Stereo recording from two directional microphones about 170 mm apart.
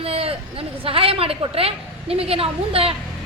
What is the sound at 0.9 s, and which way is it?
A woman's voice, 35° right (ahead or behind).